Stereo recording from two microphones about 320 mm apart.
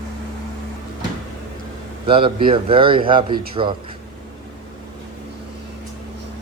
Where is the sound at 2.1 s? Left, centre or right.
Centre.